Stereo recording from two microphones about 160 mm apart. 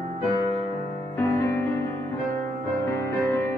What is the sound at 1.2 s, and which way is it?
Music, 15° left (ahead or behind).